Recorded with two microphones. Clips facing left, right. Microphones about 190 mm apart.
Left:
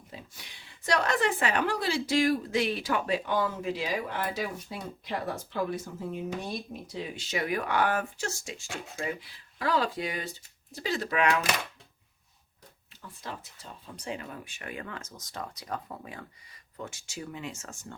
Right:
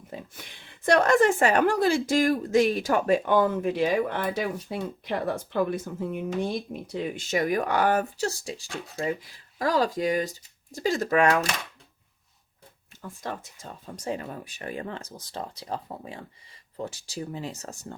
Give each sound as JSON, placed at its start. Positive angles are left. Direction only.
{"t": 0.1, "sound": "speech", "side_deg": -50}
{"t": 13.0, "sound": "speech", "side_deg": -50}